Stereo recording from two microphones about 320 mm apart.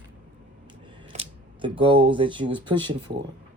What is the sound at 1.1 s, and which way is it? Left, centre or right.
Speech, centre.